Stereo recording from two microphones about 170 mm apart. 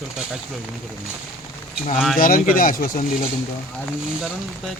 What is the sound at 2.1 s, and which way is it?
Speech, 55° left (ahead or behind).